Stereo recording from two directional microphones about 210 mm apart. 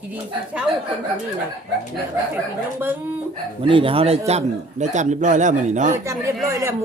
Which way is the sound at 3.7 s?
25° right (ahead or behind).